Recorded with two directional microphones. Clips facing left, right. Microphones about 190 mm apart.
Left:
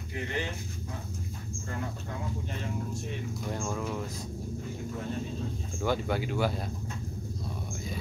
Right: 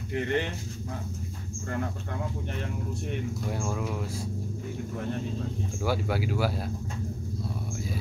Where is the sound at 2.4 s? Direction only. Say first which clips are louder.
Right 1 dB; 60° right (ahead or behind).